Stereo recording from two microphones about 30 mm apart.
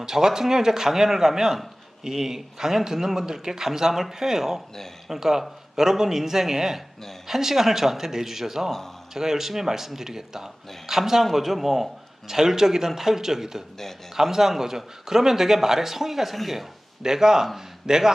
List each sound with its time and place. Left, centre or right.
0.0 s speech: centre
12.3 s speech: centre
17.0 s speech: centre